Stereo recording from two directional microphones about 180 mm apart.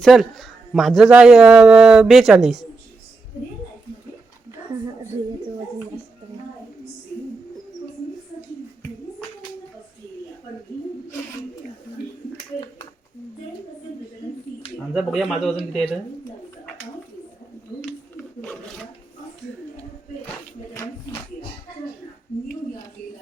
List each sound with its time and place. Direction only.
0.0 s speech: centre (ahead or behind)
14.9 s speech: centre (ahead or behind)
15.5 s speech: 35° left (ahead or behind)